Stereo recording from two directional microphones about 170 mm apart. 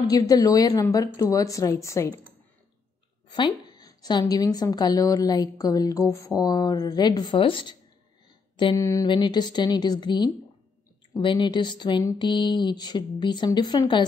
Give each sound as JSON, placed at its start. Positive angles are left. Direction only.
{"t": 0.0, "sound": "a woman's voice", "side_deg": 20}
{"t": 3.3, "sound": "a woman's voice", "side_deg": 25}
{"t": 8.7, "sound": "a woman's voice", "side_deg": 20}